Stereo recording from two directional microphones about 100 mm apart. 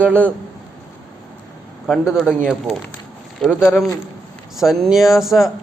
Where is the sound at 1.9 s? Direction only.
5° right (ahead or behind).